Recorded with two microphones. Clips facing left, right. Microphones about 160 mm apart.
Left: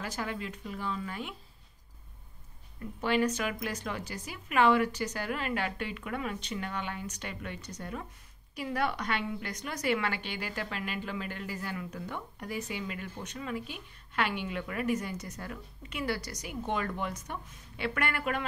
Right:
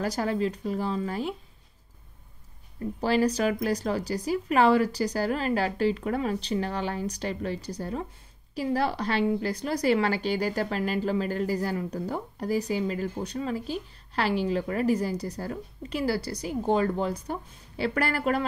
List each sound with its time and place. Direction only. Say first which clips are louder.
0.0 s a woman's voice: right 10 dB; 40° right (ahead or behind)
2.8 s a woman's voice: right 5 dB; 35° right (ahead or behind)